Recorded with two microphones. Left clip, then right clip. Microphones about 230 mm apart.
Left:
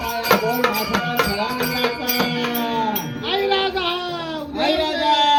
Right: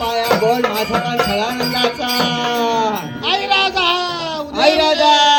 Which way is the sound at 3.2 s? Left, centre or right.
Right.